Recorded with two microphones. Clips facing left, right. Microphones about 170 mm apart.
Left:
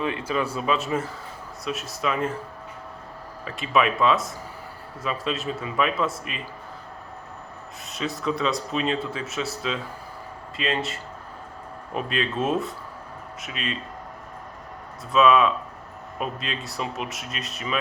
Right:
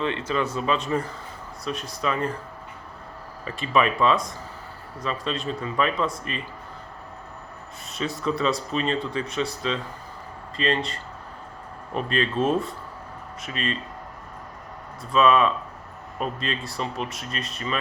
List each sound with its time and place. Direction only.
0.0 s a man's voice: 10° left (ahead or behind)
3.4 s speech: centre (ahead or behind)
7.9 s speech: centre (ahead or behind)
15.1 s speech: centre (ahead or behind)